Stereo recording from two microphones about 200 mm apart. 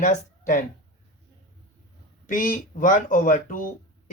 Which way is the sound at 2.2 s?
40° left (ahead or behind).